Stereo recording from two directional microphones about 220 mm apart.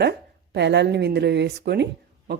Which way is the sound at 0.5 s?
50° right (ahead or behind).